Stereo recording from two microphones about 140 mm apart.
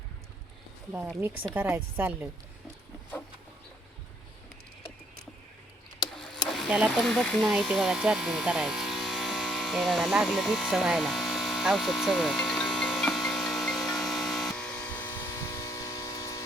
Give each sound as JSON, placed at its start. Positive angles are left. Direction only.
{"t": 1.5, "sound": "a woman's voice", "side_deg": -15}
{"t": 6.5, "sound": "electric shaver", "side_deg": -5}
{"t": 14.6, "sound": "vehicle", "side_deg": 10}